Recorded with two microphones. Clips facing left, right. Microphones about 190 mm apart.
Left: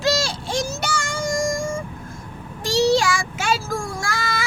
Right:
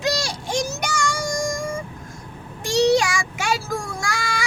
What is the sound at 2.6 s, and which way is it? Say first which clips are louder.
Child singing: right 1 dB; 15° right (ahead or behind).